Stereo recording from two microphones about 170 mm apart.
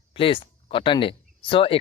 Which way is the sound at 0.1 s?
30° left (ahead or behind).